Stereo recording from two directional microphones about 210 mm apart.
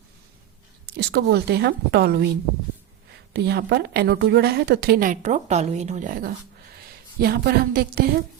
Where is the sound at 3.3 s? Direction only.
50° right (ahead or behind).